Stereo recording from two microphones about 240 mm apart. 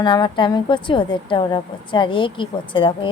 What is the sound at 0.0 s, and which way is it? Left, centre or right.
A woman's voice, centre.